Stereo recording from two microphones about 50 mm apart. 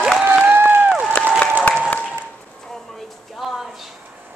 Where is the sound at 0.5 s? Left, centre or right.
Right.